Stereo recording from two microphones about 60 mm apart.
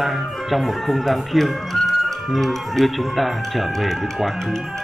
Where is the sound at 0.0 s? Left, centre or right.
Centre.